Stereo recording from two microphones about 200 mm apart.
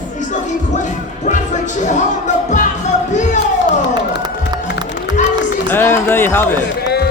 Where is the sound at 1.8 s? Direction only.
35° left (ahead or behind).